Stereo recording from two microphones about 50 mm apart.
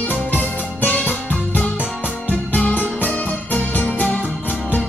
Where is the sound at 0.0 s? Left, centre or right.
Left.